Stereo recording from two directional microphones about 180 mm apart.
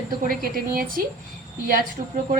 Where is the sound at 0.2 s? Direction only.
50° right (ahead or behind).